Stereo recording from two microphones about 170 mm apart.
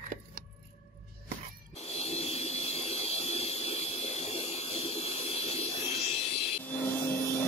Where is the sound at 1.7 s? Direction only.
40° left (ahead or behind).